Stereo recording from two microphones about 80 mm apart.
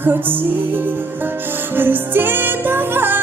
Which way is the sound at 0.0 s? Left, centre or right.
Right.